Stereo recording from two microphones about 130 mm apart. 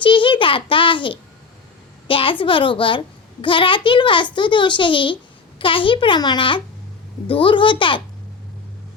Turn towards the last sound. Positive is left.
turn(degrees=40)  # may be behind; listen again after turning